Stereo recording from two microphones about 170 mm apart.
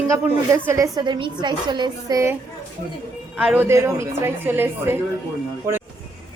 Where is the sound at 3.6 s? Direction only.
15° right (ahead or behind).